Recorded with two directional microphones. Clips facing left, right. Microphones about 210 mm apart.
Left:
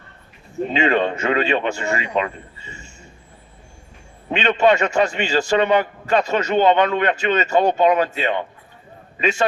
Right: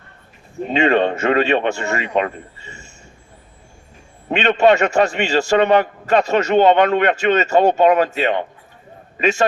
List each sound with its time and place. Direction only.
0.7 s speech: 45° right (ahead or behind)
4.3 s a man's voice: 45° right (ahead or behind)